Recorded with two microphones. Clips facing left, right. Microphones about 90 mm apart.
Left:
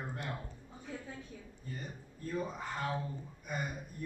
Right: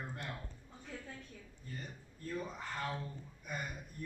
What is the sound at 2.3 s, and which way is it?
A man's voice, 15° left (ahead or behind).